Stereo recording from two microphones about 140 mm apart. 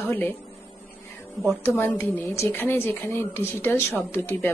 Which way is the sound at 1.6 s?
15° left (ahead or behind).